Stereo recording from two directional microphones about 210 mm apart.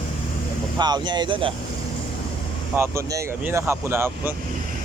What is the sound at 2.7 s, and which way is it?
Speech, 10° right (ahead or behind).